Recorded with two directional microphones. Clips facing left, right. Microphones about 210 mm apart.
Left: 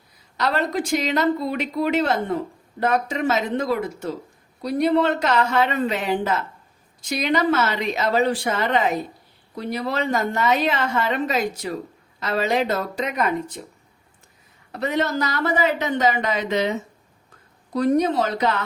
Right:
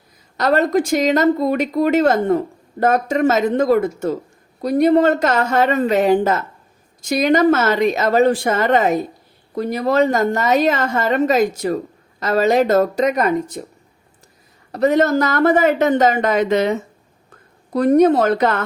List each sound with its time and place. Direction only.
0.3 s a woman's voice: 45° right (ahead or behind)
14.7 s a woman's voice: 45° right (ahead or behind)
17.7 s a woman's voice: 55° right (ahead or behind)